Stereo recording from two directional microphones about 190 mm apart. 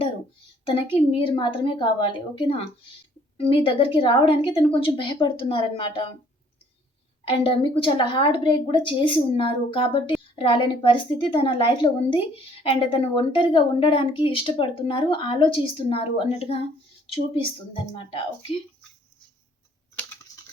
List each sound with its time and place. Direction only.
1.2 s speech: 25° left (ahead or behind)
7.3 s speech: 30° left (ahead or behind)
17.9 s speech: 25° left (ahead or behind)